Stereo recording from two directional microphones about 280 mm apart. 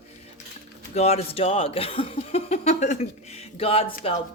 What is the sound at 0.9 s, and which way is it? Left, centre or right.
Speech, left.